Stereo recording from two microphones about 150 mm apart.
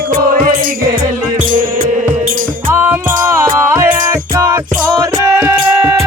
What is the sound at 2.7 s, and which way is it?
Music, 15° right (ahead or behind).